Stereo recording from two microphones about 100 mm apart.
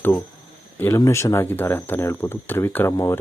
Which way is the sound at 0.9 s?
30° left (ahead or behind).